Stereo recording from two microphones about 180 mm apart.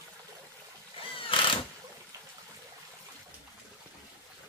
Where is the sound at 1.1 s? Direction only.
30° left (ahead or behind).